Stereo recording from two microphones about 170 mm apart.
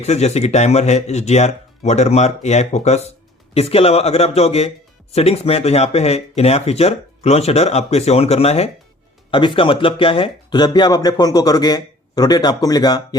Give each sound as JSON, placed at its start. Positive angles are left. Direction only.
{"t": 0.0, "sound": "speech", "side_deg": 40}